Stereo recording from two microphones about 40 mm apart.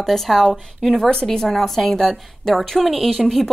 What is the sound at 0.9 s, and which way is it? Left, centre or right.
A woman's voice, centre.